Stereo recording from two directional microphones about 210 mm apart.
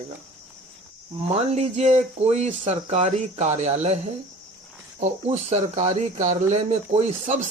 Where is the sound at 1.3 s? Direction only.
30° right (ahead or behind).